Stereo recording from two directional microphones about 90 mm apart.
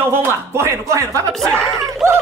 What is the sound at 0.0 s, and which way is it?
Speech, 25° right (ahead or behind).